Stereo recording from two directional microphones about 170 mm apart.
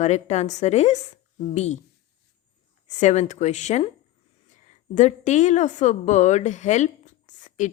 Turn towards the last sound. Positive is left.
turn(degrees=45)  # may be behind; listen again after turning